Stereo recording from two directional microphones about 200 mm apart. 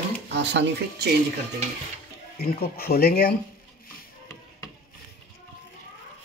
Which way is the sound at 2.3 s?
50° left (ahead or behind).